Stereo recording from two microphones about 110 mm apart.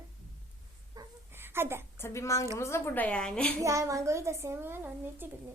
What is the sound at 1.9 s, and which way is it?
A woman's voice, 25° left (ahead or behind).